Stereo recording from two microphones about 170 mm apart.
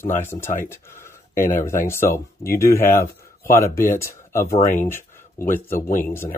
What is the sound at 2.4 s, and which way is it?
Speech, 15° left (ahead or behind).